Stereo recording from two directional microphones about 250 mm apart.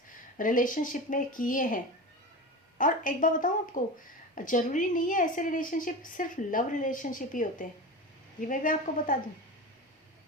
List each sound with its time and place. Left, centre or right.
0.3 s a woman's voice: left